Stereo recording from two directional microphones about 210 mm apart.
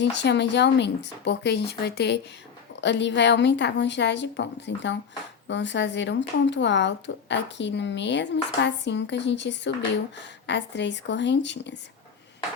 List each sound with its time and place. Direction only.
0.0 s speech: 55° left (ahead or behind)